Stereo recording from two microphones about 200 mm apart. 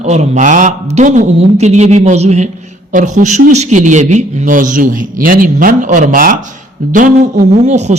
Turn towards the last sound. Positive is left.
turn(degrees=-35)  # may be behind; listen again after turning